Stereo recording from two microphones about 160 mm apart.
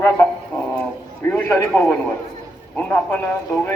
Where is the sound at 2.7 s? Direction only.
10° left (ahead or behind).